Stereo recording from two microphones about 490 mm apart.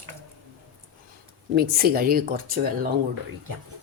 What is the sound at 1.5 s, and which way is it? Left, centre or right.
Speech, centre.